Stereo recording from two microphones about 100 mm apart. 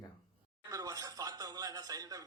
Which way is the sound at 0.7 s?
35° right (ahead or behind).